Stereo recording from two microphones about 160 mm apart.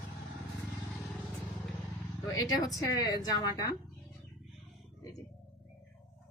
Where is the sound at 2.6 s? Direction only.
20° left (ahead or behind).